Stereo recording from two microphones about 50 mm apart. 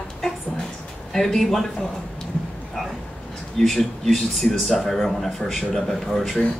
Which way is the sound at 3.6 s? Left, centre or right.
Centre.